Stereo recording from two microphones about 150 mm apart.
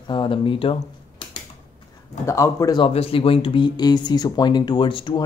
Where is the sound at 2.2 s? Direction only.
20° left (ahead or behind).